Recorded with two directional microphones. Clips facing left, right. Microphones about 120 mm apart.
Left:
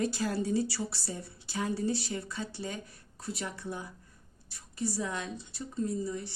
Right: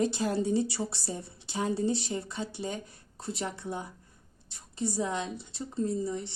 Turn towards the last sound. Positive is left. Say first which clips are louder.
# right 2 dB
turn(degrees=-25)  # may be behind; listen again after turning